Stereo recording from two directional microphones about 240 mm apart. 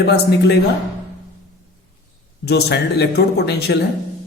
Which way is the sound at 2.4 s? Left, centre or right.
Left.